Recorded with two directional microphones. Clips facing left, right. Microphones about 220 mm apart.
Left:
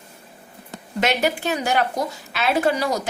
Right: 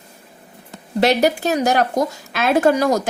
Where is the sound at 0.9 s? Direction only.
40° right (ahead or behind).